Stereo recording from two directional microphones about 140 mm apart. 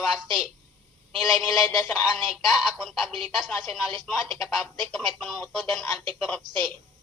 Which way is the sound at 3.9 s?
35° right (ahead or behind).